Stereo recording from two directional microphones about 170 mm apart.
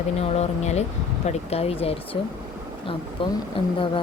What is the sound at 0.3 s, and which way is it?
Speech, 40° left (ahead or behind).